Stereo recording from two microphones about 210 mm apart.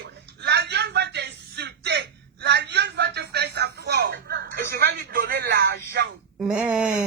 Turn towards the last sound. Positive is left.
turn(degrees=-5)  # may be behind; listen again after turning